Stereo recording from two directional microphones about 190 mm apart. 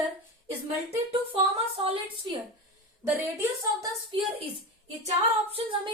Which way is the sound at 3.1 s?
15° right (ahead or behind).